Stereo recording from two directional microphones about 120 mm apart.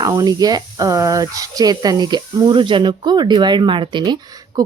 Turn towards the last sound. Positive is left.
turn(degrees=-35)  # may be behind; listen again after turning